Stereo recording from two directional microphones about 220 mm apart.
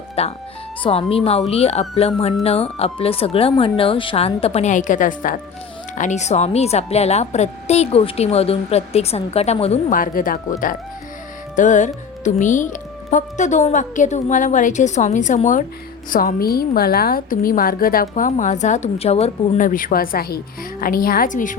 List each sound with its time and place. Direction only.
0.2 s speech: 25° left (ahead or behind)
11.5 s a woman's voice: 35° left (ahead or behind)